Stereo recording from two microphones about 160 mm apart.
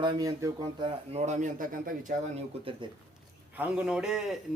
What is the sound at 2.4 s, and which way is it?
Speech, 35° right (ahead or behind).